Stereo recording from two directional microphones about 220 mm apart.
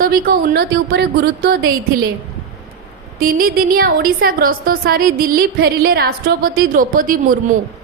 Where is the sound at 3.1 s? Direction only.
40° right (ahead or behind).